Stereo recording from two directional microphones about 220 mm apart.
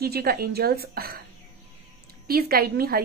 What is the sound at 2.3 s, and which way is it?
Speech, 45° right (ahead or behind).